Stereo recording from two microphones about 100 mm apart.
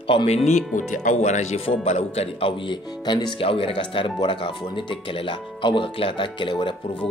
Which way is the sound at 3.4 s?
65° left (ahead or behind).